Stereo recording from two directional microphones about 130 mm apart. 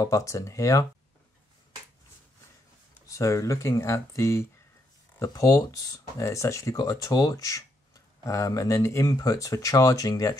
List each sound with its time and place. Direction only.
0.0 s speech: 25° left (ahead or behind)
3.1 s speech: 25° left (ahead or behind)